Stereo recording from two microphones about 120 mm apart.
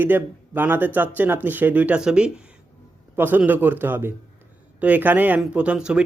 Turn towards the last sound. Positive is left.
turn(degrees=-10)  # may be behind; listen again after turning